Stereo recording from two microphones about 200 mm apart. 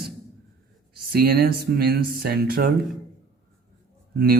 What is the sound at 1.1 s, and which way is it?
Speech, 50° right (ahead or behind).